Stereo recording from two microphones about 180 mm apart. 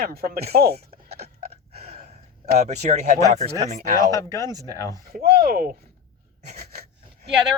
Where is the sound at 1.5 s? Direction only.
35° right (ahead or behind).